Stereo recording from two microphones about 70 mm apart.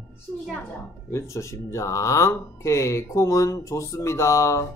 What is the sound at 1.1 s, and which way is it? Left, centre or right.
Speech, left.